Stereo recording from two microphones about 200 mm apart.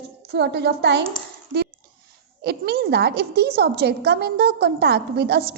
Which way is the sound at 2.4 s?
55° right (ahead or behind).